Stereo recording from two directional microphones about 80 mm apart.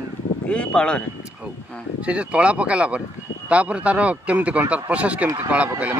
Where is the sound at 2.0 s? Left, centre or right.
Centre.